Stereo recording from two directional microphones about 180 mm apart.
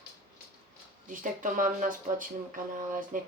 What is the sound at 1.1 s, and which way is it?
Speech, 45° right (ahead or behind).